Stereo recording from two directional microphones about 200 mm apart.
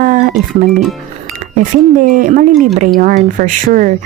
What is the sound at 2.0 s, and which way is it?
Speech, 40° right (ahead or behind).